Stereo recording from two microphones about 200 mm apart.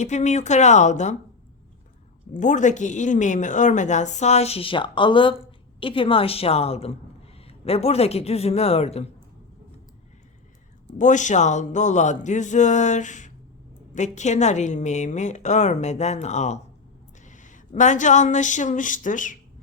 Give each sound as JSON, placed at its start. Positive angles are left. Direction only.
{"t": 0.0, "sound": "a woman's voice", "side_deg": 35}
{"t": 2.3, "sound": "a woman's voice", "side_deg": 40}
{"t": 10.9, "sound": "a woman's voice", "side_deg": 40}